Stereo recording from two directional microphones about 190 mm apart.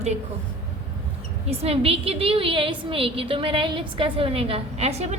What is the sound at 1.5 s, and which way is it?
A woman's voice, 30° right (ahead or behind).